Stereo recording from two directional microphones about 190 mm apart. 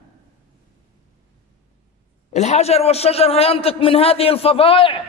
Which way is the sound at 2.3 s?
35° left (ahead or behind).